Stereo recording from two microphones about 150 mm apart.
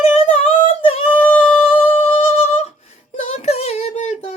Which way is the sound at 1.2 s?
10° left (ahead or behind).